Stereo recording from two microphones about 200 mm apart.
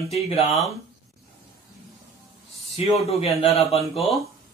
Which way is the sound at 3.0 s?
30° left (ahead or behind).